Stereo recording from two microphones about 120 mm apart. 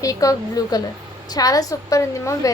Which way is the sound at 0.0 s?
30° left (ahead or behind).